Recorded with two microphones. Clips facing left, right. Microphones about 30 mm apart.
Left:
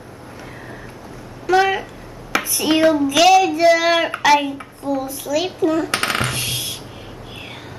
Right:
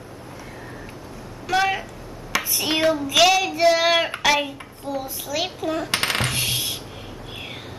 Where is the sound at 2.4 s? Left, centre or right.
Centre.